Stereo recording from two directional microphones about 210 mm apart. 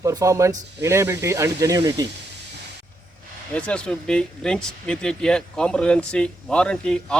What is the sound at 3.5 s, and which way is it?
Speech, 5° left (ahead or behind).